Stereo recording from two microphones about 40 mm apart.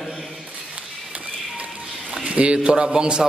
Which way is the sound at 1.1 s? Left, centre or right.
Right.